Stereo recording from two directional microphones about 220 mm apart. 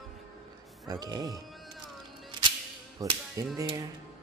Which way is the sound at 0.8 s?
15° right (ahead or behind).